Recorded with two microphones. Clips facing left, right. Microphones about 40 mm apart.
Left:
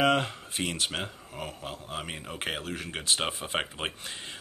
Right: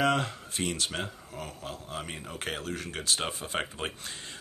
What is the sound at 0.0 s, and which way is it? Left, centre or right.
Speech, centre.